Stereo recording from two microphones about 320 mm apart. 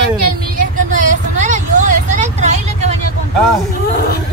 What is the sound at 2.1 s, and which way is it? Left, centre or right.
Vehicle, right.